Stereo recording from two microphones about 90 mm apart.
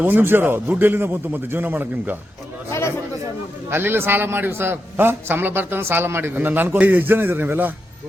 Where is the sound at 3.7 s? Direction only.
25° right (ahead or behind).